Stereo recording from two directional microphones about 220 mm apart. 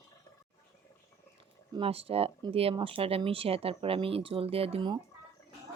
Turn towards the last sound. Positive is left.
turn(degrees=-25)  # may be behind; listen again after turning